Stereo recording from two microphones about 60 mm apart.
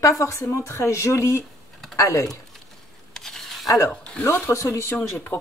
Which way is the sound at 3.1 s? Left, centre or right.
Centre.